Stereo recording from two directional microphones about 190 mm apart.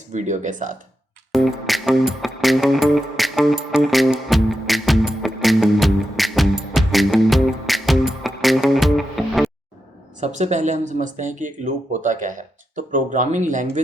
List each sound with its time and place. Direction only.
0.1 s speech: 40° right (ahead or behind)
1.3 s music: centre (ahead or behind)
10.2 s speech: 35° right (ahead or behind)